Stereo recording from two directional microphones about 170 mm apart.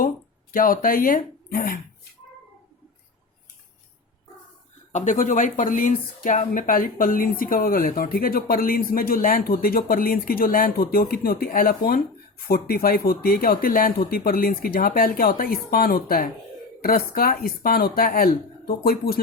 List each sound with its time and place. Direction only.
0.5 s speech: 55° left (ahead or behind)
4.9 s speech: 45° left (ahead or behind); by 19.2 s 65° left (ahead or behind)